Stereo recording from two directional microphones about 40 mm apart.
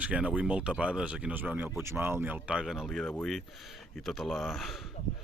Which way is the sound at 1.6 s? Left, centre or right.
Right.